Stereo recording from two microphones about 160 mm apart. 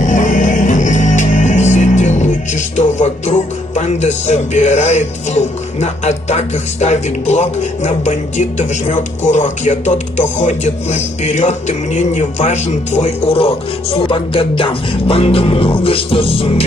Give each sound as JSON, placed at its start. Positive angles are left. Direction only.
{"t": 0.0, "sound": "music", "side_deg": 50}